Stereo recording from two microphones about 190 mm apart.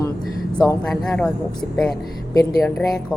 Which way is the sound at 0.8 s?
5° left (ahead or behind).